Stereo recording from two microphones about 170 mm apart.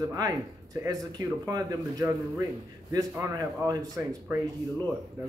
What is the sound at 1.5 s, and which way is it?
A man's voice, 25° right (ahead or behind).